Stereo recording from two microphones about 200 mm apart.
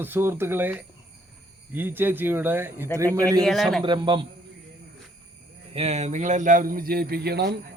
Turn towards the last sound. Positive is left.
turn(degrees=-55)  # may be behind; listen again after turning